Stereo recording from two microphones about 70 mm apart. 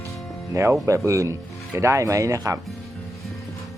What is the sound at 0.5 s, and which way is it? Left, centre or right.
Speech, right.